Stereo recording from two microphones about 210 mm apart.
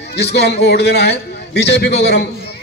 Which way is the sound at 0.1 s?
55° left (ahead or behind).